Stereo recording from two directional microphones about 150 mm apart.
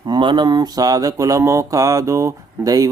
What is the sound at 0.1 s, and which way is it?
Mantra, 30° right (ahead or behind).